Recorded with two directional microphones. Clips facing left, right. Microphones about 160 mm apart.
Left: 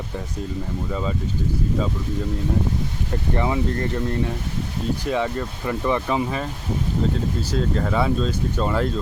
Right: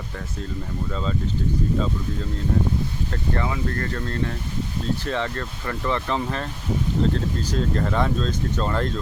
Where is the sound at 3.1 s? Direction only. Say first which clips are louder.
Left 5 dB; 20° left (ahead or behind).